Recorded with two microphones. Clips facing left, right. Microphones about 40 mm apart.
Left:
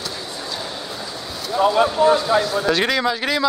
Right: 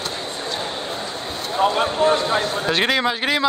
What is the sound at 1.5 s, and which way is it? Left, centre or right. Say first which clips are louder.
Speech: left 3 dB; centre.